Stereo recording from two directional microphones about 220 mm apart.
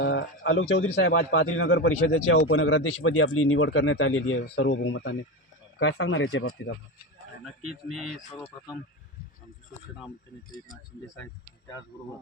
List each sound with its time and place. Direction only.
0.0 s speech: 55° left (ahead or behind)
2.5 s speech: 65° left (ahead or behind)